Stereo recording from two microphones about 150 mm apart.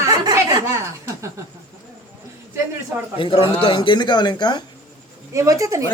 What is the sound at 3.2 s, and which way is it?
Speech, 35° left (ahead or behind).